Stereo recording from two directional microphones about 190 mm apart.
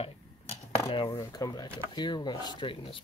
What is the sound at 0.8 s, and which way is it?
Cutlery, 25° left (ahead or behind).